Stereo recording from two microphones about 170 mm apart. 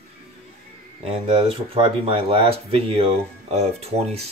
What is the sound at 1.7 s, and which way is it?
Speech, 35° right (ahead or behind).